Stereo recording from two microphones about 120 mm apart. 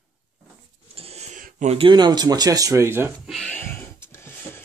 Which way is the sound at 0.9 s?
55° right (ahead or behind).